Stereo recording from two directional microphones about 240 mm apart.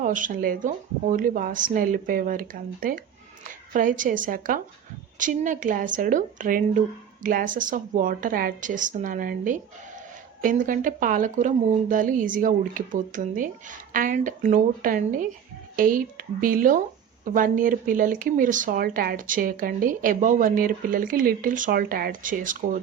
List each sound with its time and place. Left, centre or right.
0.0 s speech: right